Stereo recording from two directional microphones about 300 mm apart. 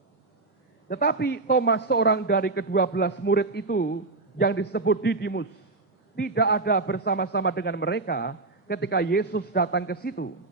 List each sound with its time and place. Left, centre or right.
0.9 s a man's voice: left